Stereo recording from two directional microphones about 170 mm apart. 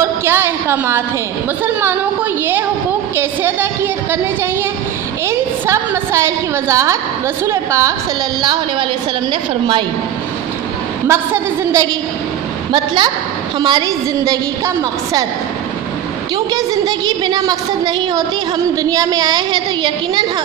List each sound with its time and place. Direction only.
0.0 s a sound: 15° right (ahead or behind)
3.2 s a woman's voice: 15° right (ahead or behind); by 9.8 s 30° right (ahead or behind)
11.1 s a woman's voice: 15° right (ahead or behind)
12.7 s a woman's voice: 25° right (ahead or behind)
16.5 s a woman's voice: 25° right (ahead or behind)